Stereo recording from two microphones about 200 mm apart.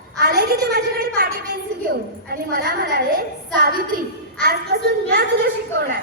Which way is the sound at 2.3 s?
50° right (ahead or behind).